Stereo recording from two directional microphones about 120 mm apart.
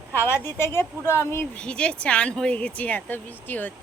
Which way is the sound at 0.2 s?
20° left (ahead or behind).